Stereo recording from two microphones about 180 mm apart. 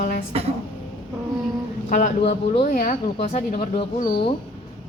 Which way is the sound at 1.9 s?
45° left (ahead or behind).